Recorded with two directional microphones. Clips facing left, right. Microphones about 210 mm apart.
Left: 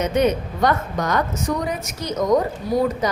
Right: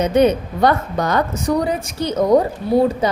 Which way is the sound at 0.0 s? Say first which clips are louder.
Right 4 dB; 30° right (ahead or behind).